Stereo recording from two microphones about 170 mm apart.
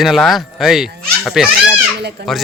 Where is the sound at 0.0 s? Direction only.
Centre (ahead or behind).